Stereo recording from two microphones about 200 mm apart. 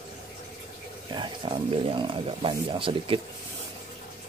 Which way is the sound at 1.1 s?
25° right (ahead or behind).